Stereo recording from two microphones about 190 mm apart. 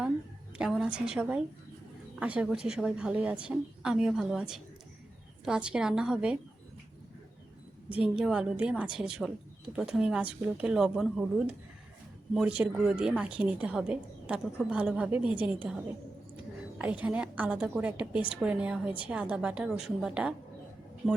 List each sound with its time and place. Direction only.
0.6 s a woman's voice: 5° right (ahead or behind)
7.9 s a woman's voice: 5° right (ahead or behind)
16.7 s a woman's voice: 10° right (ahead or behind)